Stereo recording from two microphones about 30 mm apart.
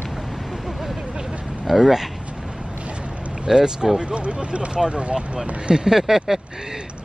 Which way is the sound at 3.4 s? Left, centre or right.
Right.